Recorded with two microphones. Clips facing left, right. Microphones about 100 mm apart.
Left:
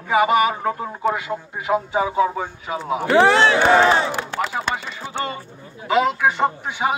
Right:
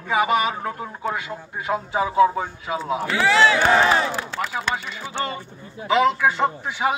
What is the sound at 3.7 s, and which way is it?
Speech, 25° left (ahead or behind).